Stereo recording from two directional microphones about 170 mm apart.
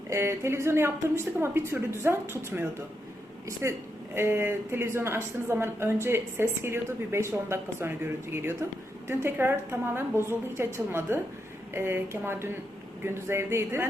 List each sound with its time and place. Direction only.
0.1 s a woman's voice: 15° right (ahead or behind)